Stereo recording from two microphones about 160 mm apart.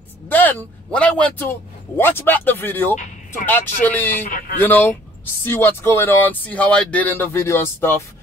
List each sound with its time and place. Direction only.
0.3 s speech: 10° left (ahead or behind)
4.3 s speech: 60° left (ahead or behind)
4.6 s speech: 10° left (ahead or behind)